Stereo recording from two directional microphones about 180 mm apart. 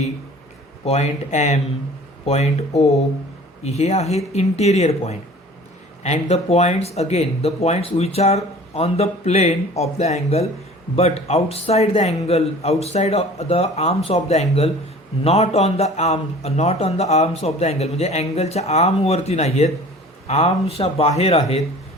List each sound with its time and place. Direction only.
0.9 s speech: 35° left (ahead or behind)